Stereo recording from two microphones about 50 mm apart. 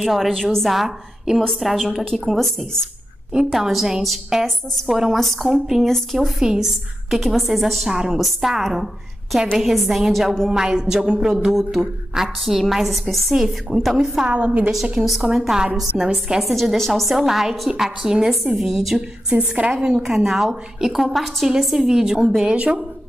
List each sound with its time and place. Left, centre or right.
0.0 s a woman's voice: centre
0.7 s a woman's voice: centre
10.5 s a woman's voice: centre
14.3 s a woman's voice: right
15.2 s a woman's voice: centre
16.3 s a woman's voice: centre
18.9 s a woman's voice: right
19.7 s a woman's voice: centre
22.5 s a woman's voice: right